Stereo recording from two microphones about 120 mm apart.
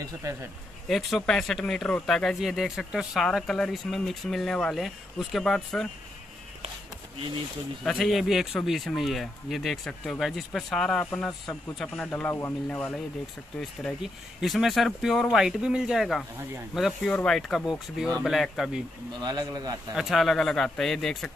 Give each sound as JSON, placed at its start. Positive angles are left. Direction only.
{"t": 0.0, "sound": "speech", "side_deg": -25}
{"t": 0.8, "sound": "speech", "side_deg": 0}
{"t": 7.8, "sound": "speech", "side_deg": 0}
{"t": 12.3, "sound": "a man's voice", "side_deg": 20}
{"t": 12.6, "sound": "speech", "side_deg": 10}
{"t": 14.4, "sound": "speech", "side_deg": 0}
{"t": 19.2, "sound": "a man's voice", "side_deg": -35}
{"t": 20.0, "sound": "speech", "side_deg": 0}